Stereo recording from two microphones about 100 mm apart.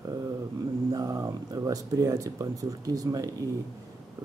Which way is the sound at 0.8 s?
40° right (ahead or behind).